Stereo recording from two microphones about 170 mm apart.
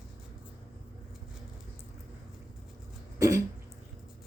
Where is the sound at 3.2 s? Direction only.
20° right (ahead or behind).